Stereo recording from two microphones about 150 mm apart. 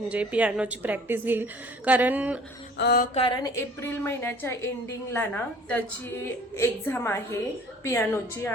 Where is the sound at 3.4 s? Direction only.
15° left (ahead or behind).